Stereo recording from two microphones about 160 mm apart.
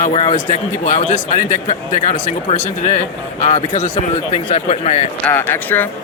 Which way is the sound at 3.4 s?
50° left (ahead or behind).